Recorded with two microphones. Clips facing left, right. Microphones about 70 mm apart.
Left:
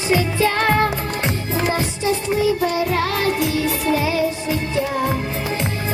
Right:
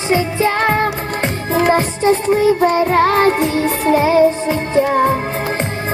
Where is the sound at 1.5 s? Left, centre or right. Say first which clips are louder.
Right 10 dB; right.